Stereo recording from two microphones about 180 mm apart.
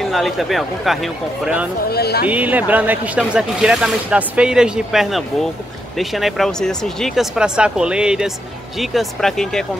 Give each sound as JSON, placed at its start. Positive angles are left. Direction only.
{"t": 0.0, "sound": "speech", "side_deg": 0}
{"t": 1.9, "sound": "speech", "side_deg": 60}
{"t": 2.2, "sound": "speech", "side_deg": -10}